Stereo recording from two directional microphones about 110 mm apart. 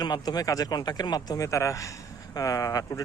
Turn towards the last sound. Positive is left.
turn(degrees=35)  # may be behind; listen again after turning